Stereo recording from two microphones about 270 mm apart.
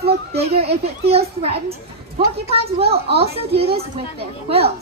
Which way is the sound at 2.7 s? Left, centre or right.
Right.